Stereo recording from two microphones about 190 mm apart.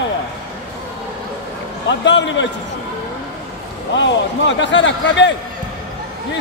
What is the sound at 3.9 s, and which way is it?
Speech, 75° left (ahead or behind).